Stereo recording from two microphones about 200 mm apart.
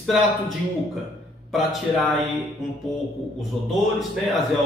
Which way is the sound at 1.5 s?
Centre (ahead or behind).